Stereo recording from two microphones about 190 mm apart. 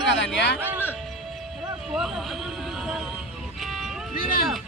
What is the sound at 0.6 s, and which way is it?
Music, 10° right (ahead or behind).